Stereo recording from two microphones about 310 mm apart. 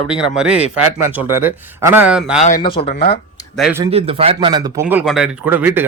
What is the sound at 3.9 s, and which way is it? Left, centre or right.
Speech, centre.